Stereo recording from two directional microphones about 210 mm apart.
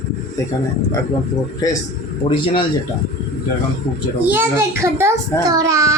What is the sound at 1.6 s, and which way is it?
A man's voice, 20° left (ahead or behind).